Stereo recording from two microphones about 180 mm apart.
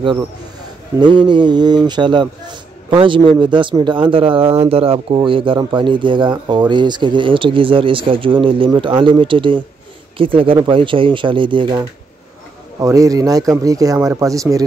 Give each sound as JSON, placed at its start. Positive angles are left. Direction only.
{"t": 0.9, "sound": "a man's voice", "side_deg": -25}
{"t": 12.8, "sound": "a man's voice", "side_deg": -20}